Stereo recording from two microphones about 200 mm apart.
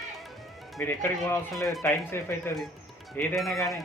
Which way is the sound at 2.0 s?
10° left (ahead or behind).